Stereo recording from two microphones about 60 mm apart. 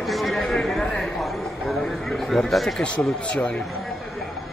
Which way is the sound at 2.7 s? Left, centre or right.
Centre.